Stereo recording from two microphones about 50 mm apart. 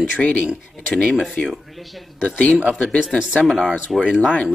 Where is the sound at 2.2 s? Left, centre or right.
Left.